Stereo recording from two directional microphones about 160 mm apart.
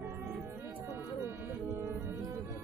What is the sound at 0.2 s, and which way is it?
Music, 10° right (ahead or behind).